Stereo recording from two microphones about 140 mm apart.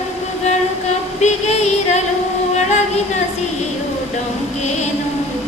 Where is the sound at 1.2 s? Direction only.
55° left (ahead or behind).